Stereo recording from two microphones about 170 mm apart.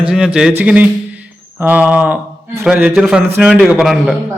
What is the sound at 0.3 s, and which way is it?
A man's voice, 5° right (ahead or behind).